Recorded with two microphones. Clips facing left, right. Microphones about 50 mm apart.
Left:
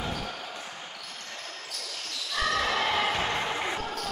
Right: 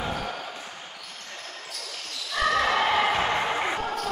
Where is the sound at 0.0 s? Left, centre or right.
Centre.